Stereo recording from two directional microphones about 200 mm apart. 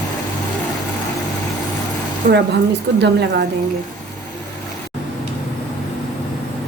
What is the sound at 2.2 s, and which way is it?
A woman's voice, 45° right (ahead or behind).